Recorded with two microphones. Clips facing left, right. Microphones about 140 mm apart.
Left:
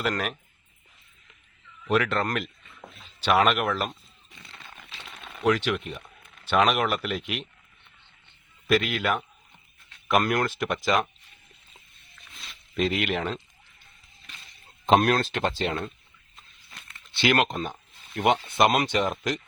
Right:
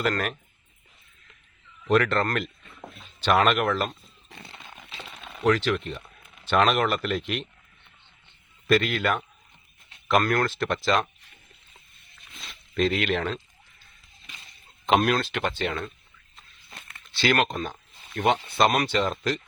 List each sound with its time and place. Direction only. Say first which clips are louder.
0.0 s speech: right 2 dB; 10° left (ahead or behind)
1.9 s speech: right 2 dB; 5° left (ahead or behind)
4.8 s a sound: right 3 dB; centre (ahead or behind)
5.5 s speech: right 1 dB; 10° left (ahead or behind)
8.6 s speech: right 1 dB; 5° left (ahead or behind)
12.7 s speech: right 2 dB; 10° left (ahead or behind)
15.0 s speech: left 1 dB; 45° left (ahead or behind)
15.4 s speech: left 1 dB; 30° left (ahead or behind)
17.2 s speech: even; 20° left (ahead or behind)